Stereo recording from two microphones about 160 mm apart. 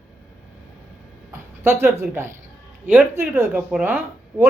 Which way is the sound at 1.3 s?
15° right (ahead or behind).